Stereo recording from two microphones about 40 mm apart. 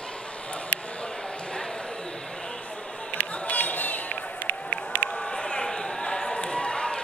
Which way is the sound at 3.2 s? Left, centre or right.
Left.